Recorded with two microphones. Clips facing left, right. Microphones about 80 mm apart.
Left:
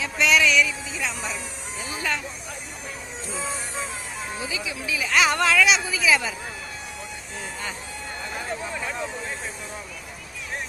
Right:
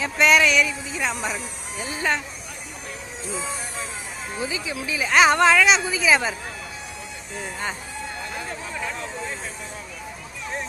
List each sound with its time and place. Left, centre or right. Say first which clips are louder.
0.0 s music: right 3 dB; right
2.0 s speech: right 4 dB; right
4.4 s speech: right 4 dB; right